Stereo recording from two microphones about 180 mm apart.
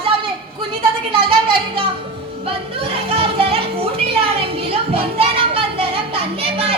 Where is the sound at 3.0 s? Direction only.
30° right (ahead or behind).